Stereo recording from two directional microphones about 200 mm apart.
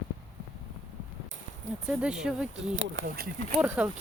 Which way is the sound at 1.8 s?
5° right (ahead or behind).